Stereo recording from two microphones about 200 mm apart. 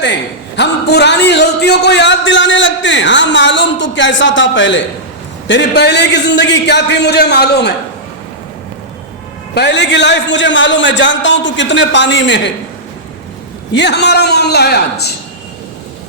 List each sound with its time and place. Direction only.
0.0 s a man's voice: 60° left (ahead or behind)
9.6 s a man's voice: 60° left (ahead or behind)
13.7 s a man's voice: 60° left (ahead or behind)